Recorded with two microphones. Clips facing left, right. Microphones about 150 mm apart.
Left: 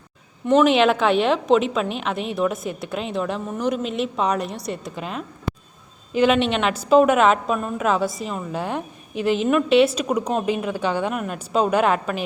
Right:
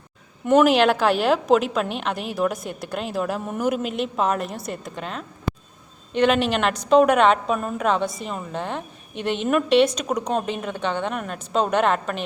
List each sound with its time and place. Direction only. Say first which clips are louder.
0.4 s a woman's voice: even; 5° right (ahead or behind)